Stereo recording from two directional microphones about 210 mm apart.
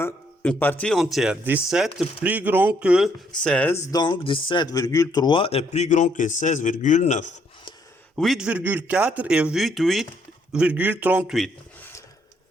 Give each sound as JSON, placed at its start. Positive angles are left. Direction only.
{"t": 0.0, "sound": "speech", "side_deg": 10}
{"t": 8.1, "sound": "speech", "side_deg": 0}